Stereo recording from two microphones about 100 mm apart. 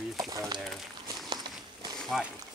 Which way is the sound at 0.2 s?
35° right (ahead or behind).